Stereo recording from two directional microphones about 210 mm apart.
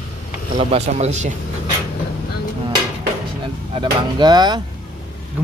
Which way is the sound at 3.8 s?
20° right (ahead or behind).